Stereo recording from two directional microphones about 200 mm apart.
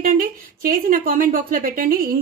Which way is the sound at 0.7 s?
45° right (ahead or behind).